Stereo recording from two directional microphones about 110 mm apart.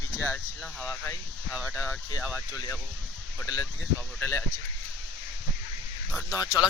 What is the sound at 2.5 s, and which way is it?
Speech, 35° left (ahead or behind).